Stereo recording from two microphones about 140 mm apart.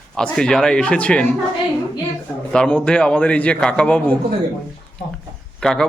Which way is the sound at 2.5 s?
10° left (ahead or behind).